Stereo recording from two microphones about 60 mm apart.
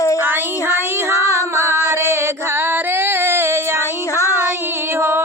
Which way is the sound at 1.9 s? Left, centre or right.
Right.